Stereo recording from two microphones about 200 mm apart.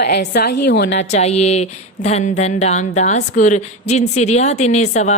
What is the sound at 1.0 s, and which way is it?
Speech, 35° left (ahead or behind).